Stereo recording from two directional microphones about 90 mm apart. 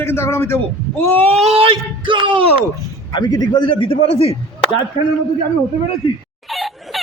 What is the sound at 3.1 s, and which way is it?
A man's voice, 50° left (ahead or behind).